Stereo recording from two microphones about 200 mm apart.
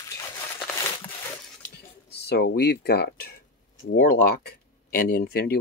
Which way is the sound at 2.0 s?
55° left (ahead or behind).